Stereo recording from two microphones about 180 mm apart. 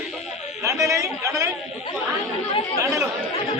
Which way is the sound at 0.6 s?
20° right (ahead or behind).